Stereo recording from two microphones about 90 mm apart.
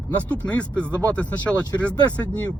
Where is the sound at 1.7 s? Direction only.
35° left (ahead or behind).